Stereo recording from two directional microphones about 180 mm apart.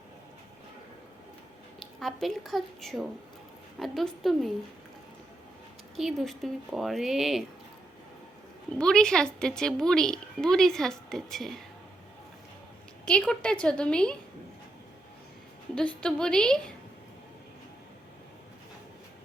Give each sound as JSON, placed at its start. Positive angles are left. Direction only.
{"t": 2.0, "sound": "a woman's voice", "side_deg": 0}
{"t": 6.0, "sound": "a woman's voice", "side_deg": 0}
{"t": 8.8, "sound": "a woman's voice", "side_deg": 5}
{"t": 13.1, "sound": "a woman's voice", "side_deg": 5}
{"t": 15.7, "sound": "a woman's voice", "side_deg": 5}